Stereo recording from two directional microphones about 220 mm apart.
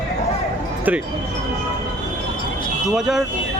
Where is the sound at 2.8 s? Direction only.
Centre (ahead or behind).